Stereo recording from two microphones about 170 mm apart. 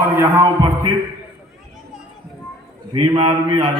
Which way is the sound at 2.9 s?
25° right (ahead or behind).